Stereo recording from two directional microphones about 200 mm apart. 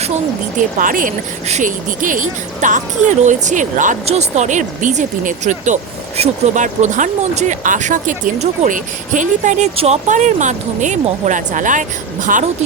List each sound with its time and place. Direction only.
0.8 s speech: 45° right (ahead or behind)